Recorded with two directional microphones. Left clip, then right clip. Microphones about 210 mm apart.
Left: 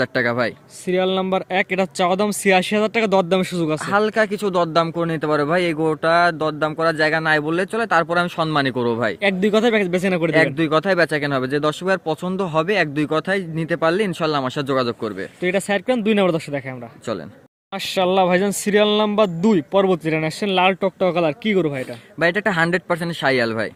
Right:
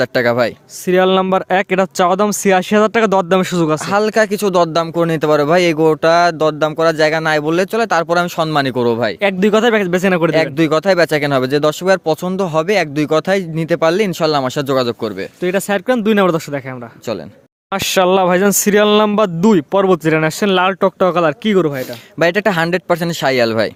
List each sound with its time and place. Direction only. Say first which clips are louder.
0.0 s speech: right 6 dB; 50° right (ahead or behind); by 16.6 s 30° right (ahead or behind)
17.7 s speech: right 7 dB; 45° right (ahead or behind)
22.2 s speech: right 4 dB; 50° right (ahead or behind)